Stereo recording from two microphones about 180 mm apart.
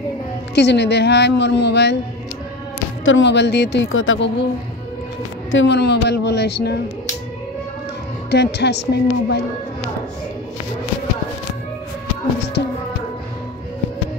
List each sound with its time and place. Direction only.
0.6 s speech: 70° left (ahead or behind)
3.1 s speech: 80° left
5.5 s speech: 80° left
8.3 s speech: 70° left (ahead or behind)